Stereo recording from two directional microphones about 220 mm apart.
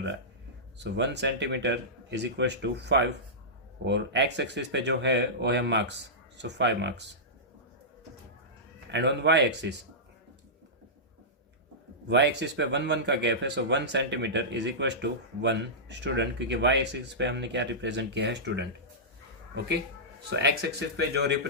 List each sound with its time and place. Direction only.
0.8 s speech: 50° right (ahead or behind)
8.9 s speech: 50° right (ahead or behind)
12.0 s speech: 50° right (ahead or behind)
20.3 s speech: 50° right (ahead or behind)